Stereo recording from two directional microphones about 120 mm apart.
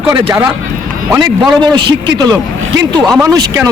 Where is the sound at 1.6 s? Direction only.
40° right (ahead or behind).